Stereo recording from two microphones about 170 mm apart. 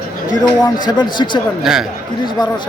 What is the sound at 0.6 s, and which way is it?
Speech, 25° left (ahead or behind).